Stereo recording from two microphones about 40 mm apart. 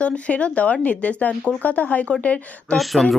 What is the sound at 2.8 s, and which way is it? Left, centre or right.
Speech, centre.